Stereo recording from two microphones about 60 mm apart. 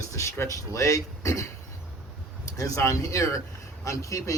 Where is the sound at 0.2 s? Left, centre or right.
Left.